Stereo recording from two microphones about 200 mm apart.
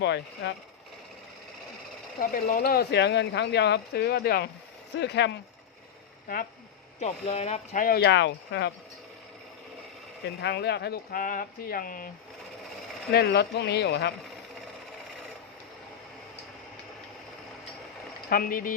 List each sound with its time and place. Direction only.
0.0 s speech: 60° left (ahead or behind)
2.3 s speech: 45° left (ahead or behind)
7.0 s speech: 35° left (ahead or behind); by 8.7 s 60° left (ahead or behind)
10.4 s speech: 55° left (ahead or behind)
13.1 s speech: 55° left (ahead or behind)
18.3 s speech: 45° left (ahead or behind)